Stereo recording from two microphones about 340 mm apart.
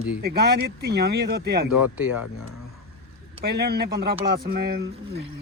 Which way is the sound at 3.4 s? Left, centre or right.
Right.